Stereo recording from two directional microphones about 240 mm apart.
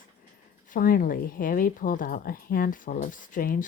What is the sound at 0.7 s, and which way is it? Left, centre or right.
Speech, left.